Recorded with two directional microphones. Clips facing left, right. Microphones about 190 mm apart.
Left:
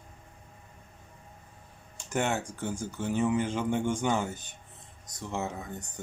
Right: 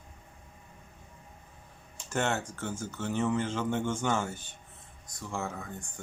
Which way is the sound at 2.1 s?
15° left (ahead or behind).